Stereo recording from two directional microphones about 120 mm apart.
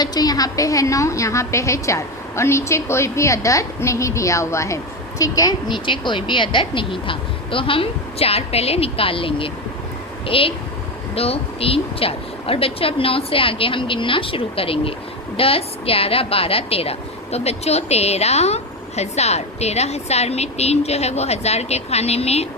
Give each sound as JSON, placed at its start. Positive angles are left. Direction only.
{"t": 0.0, "sound": "a woman's voice", "side_deg": 35}